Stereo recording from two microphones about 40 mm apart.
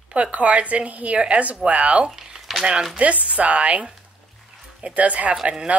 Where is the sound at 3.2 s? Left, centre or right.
Right.